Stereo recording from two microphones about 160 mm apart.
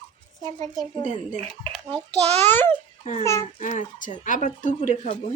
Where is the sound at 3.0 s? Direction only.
40° left (ahead or behind).